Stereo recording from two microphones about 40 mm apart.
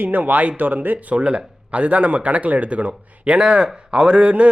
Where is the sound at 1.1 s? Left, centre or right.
Right.